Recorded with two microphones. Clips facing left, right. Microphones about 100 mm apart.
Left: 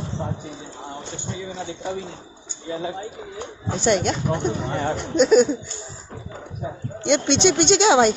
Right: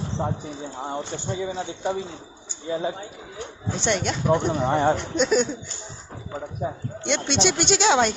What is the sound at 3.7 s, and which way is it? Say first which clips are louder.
Speech: left 5 dB; 5° left (ahead or behind).